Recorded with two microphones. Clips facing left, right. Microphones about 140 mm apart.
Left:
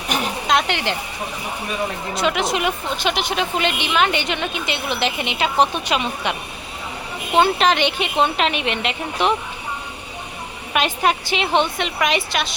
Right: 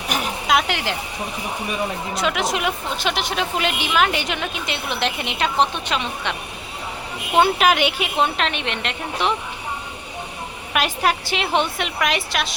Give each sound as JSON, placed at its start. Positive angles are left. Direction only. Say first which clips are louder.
{"t": 0.1, "sound": "a sound", "louder": "left 1 dB", "side_deg": 0}
{"t": 2.1, "sound": "a woman's voice", "louder": "left 2 dB", "side_deg": 0}
{"t": 7.3, "sound": "a woman's voice", "louder": "even", "side_deg": -10}
{"t": 10.8, "sound": "a woman's voice", "louder": "left 1 dB", "side_deg": 0}